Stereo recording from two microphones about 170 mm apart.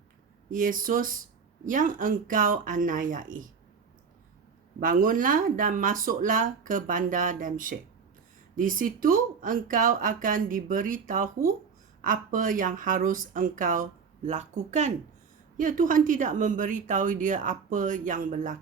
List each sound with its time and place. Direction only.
0.5 s speech: 55° right (ahead or behind)
4.8 s speech: 55° right (ahead or behind)